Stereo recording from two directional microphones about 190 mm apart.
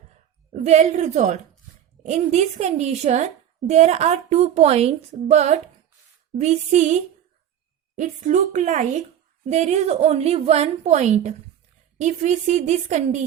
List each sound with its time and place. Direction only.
0.5 s a woman's voice: 35° right (ahead or behind)